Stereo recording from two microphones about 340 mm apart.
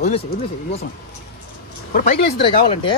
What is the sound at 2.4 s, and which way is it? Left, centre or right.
Speech, centre.